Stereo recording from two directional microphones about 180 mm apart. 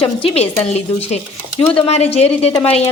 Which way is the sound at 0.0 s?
30° left (ahead or behind).